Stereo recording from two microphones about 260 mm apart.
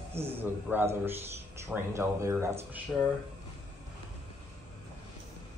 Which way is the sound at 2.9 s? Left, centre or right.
Centre.